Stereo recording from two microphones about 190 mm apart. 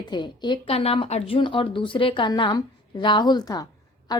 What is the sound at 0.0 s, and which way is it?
A woman's voice, 25° left (ahead or behind).